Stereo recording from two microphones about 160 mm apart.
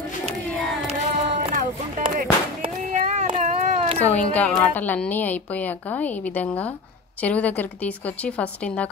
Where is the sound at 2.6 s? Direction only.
45° right (ahead or behind).